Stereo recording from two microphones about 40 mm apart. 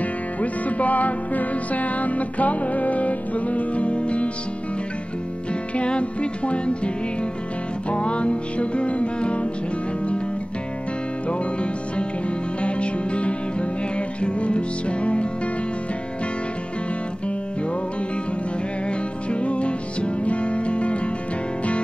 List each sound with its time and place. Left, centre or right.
0.4 s music: left
5.8 s music: left
7.9 s music: left
11.2 s music: left
18.9 s music: left